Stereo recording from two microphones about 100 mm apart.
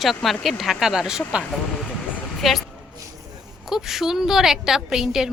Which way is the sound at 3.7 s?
5° right (ahead or behind).